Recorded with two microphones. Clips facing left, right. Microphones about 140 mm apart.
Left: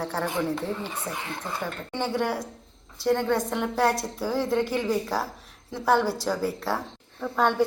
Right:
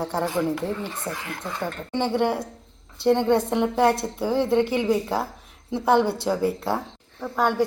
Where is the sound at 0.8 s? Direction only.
15° left (ahead or behind).